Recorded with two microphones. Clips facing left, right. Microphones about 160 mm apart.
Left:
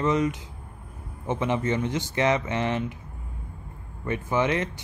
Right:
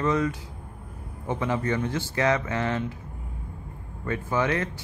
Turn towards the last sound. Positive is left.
turn(degrees=20)  # may be behind; listen again after turning